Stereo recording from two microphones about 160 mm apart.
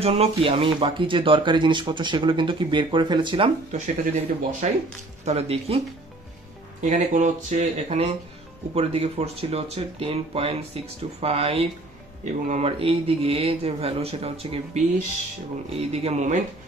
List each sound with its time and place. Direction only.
0.0 s speech: 40° right (ahead or behind)
3.7 s speech: 50° right (ahead or behind)
5.2 s speech: 40° right (ahead or behind)
6.8 s speech: 55° right (ahead or behind); by 14.8 s 35° right (ahead or behind)
15.9 s speech: 40° right (ahead or behind)